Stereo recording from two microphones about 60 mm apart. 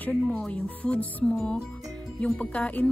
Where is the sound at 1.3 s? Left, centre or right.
Centre.